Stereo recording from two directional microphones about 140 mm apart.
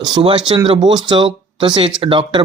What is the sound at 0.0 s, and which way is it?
Speech, 35° right (ahead or behind).